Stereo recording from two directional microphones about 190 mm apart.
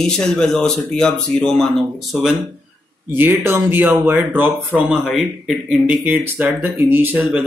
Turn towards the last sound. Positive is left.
turn(degrees=-10)  # may be behind; listen again after turning